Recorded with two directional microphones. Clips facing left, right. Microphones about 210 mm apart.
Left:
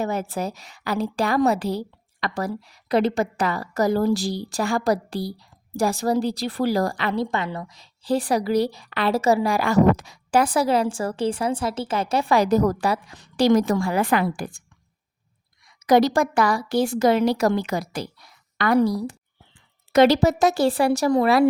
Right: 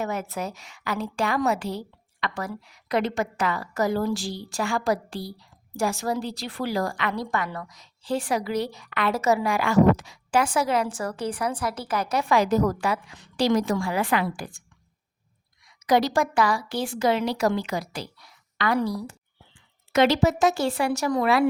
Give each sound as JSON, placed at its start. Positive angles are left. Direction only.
{"t": 0.0, "sound": "a woman's voice", "side_deg": 30}
{"t": 15.8, "sound": "a woman's voice", "side_deg": 45}